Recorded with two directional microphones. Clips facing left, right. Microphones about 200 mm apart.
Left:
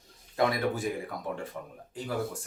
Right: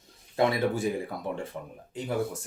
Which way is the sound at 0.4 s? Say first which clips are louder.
Right 2 dB; 25° right (ahead or behind).